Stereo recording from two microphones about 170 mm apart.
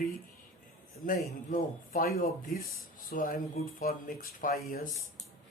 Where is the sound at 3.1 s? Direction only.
50° left (ahead or behind).